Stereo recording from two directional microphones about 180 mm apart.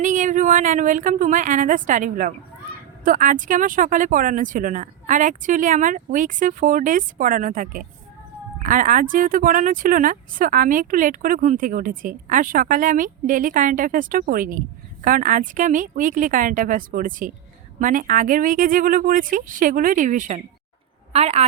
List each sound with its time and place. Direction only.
0.0 s a woman's voice: 45° right (ahead or behind)